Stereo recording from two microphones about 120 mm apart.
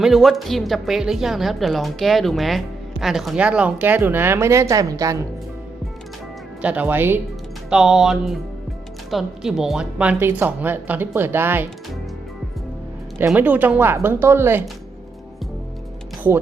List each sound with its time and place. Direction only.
0.0 s a woman's voice: centre (ahead or behind); by 5.2 s 30° right (ahead or behind)
6.6 s speech: 10° right (ahead or behind)
7.7 s a woman's voice: 5° right (ahead or behind)
13.1 s speech: 15° right (ahead or behind)